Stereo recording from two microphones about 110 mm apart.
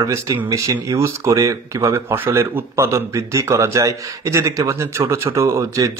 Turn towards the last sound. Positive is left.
turn(degrees=-30)  # may be behind; listen again after turning